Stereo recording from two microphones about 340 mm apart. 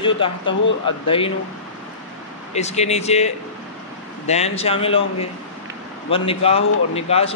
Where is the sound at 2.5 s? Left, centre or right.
Centre.